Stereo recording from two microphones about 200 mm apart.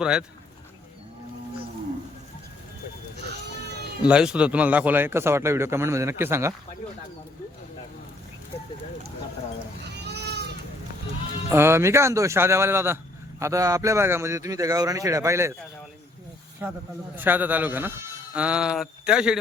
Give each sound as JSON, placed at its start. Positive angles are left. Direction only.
{"t": 0.0, "sound": "speech", "side_deg": -5}
{"t": 4.1, "sound": "a man's voice", "side_deg": -5}
{"t": 9.8, "sound": "baby cry", "side_deg": -55}
{"t": 11.4, "sound": "a man's voice", "side_deg": -10}
{"t": 17.2, "sound": "a man's voice", "side_deg": -10}